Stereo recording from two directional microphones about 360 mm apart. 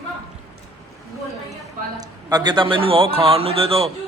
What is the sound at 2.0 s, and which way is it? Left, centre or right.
Speech, centre.